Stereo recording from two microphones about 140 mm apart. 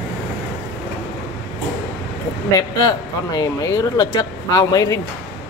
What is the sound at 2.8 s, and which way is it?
Speech, 30° left (ahead or behind).